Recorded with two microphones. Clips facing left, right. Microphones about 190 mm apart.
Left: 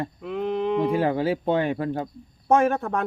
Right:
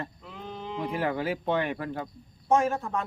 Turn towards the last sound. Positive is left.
turn(degrees=65)  # may be behind; listen again after turning